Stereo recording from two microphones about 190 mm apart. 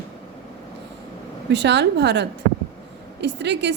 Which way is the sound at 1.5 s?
65° right (ahead or behind).